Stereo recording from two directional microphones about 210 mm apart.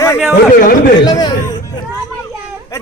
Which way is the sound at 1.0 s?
20° left (ahead or behind).